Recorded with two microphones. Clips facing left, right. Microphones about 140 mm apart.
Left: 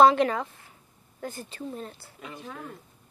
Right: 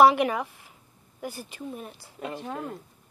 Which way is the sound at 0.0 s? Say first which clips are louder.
Even; 15° right (ahead or behind).